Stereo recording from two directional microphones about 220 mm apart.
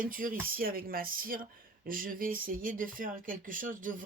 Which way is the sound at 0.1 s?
40° right (ahead or behind).